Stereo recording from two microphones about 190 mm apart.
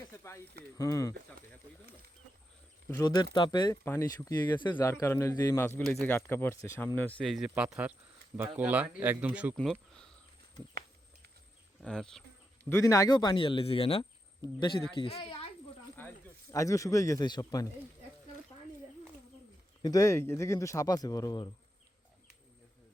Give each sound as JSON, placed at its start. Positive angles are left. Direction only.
{"t": 0.2, "sound": "snake", "side_deg": 15}
{"t": 0.8, "sound": "speech", "side_deg": 15}
{"t": 2.9, "sound": "speech", "side_deg": 20}
{"t": 9.6, "sound": "speech", "side_deg": 5}
{"t": 11.8, "sound": "insect", "side_deg": 5}
{"t": 12.6, "sound": "speech", "side_deg": 15}
{"t": 16.0, "sound": "speech", "side_deg": 15}
{"t": 19.8, "sound": "speech", "side_deg": 20}